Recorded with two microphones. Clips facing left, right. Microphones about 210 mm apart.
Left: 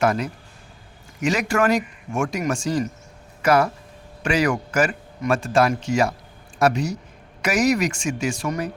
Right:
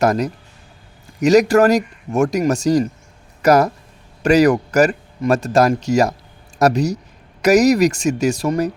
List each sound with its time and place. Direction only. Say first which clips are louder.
0.0 s a man's voice: right 4 dB; 40° right (ahead or behind)